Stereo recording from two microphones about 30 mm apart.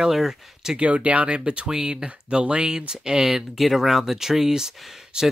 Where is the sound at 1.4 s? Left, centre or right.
Right.